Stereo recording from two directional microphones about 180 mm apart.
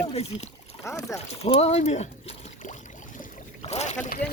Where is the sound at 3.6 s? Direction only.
40° left (ahead or behind).